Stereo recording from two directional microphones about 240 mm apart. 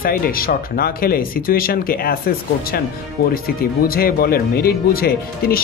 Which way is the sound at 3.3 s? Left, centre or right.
Left.